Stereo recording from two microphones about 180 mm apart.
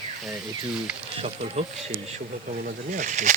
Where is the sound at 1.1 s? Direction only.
35° right (ahead or behind).